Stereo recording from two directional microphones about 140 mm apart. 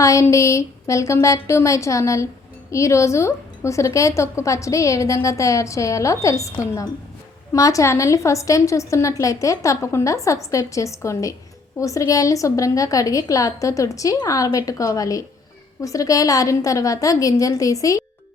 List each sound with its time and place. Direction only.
0.0 s a woman's voice: 20° left (ahead or behind)